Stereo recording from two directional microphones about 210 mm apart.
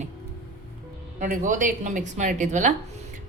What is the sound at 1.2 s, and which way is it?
Speech, 35° right (ahead or behind).